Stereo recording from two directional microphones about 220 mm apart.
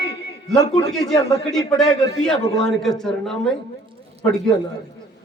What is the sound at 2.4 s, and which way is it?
Speech, 20° left (ahead or behind).